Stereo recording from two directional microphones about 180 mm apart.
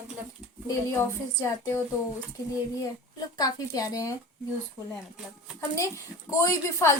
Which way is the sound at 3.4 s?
20° left (ahead or behind).